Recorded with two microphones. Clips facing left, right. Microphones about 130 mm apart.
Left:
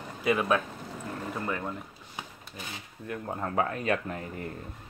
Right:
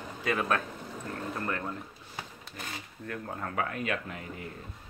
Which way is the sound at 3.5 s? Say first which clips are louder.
Left 4 dB; 35° left (ahead or behind).